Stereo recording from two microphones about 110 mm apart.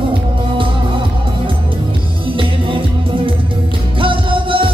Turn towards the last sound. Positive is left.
turn(degrees=-50)  # may be behind; listen again after turning